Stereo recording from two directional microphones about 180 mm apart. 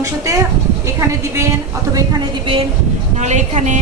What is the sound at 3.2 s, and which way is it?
Speech, 40° right (ahead or behind).